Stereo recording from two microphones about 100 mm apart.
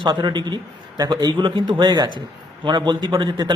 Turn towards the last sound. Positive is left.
turn(degrees=-50)  # may be behind; listen again after turning